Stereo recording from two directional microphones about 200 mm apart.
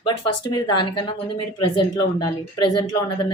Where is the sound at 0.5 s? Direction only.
20° left (ahead or behind).